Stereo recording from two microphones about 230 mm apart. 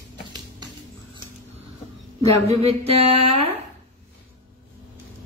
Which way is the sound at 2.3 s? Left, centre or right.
Right.